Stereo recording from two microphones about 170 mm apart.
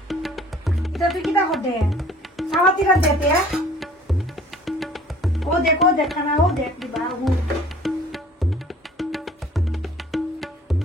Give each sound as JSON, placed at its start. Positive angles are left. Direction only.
{"t": 0.1, "sound": "music", "side_deg": 0}
{"t": 3.5, "sound": "tabla", "side_deg": 0}